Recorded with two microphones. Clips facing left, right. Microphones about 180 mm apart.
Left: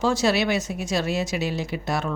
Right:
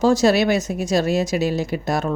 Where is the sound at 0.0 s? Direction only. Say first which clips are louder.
Right 6 dB; 40° right (ahead or behind).